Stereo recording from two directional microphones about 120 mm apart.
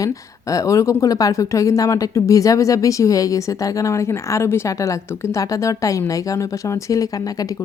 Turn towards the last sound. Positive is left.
turn(degrees=25)  # may be behind; listen again after turning